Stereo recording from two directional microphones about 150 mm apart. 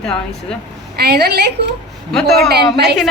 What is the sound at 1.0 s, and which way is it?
Speech, 90° right.